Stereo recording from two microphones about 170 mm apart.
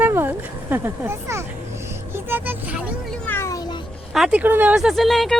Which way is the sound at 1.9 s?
15° right (ahead or behind).